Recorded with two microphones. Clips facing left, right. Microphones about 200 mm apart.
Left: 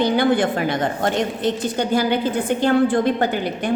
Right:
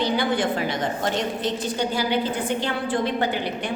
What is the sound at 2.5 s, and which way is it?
A woman's voice, 50° left (ahead or behind).